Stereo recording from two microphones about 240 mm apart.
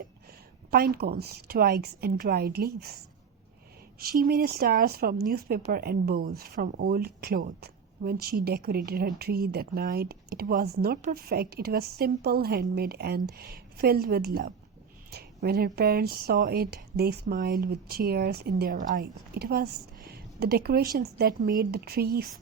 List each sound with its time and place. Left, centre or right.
0.7 s speech: right
4.0 s speech: right